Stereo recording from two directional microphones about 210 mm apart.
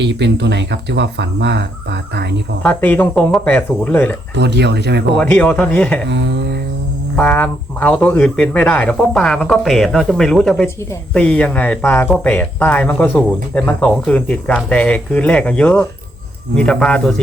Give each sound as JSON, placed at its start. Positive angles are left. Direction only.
{"t": 0.0, "sound": "speech", "side_deg": -55}
{"t": 2.6, "sound": "speech", "side_deg": 10}
{"t": 4.4, "sound": "speech", "side_deg": -55}
{"t": 5.1, "sound": "speech", "side_deg": 5}
{"t": 6.1, "sound": "speech", "side_deg": -55}
{"t": 7.2, "sound": "speech", "side_deg": 10}